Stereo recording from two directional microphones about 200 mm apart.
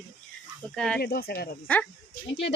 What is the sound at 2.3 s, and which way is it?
Speech, 60° left (ahead or behind).